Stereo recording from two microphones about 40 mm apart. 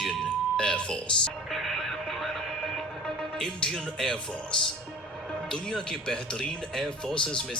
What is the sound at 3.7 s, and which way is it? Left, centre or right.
Speech, centre.